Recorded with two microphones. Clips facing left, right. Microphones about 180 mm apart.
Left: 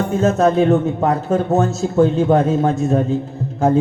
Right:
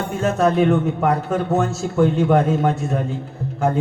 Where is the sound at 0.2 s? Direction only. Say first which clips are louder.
Left 2 dB; 25° left (ahead or behind).